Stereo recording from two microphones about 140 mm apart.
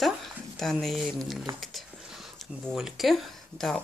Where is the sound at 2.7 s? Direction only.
Centre (ahead or behind).